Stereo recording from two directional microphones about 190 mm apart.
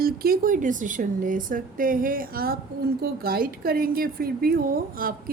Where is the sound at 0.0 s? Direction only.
50° right (ahead or behind).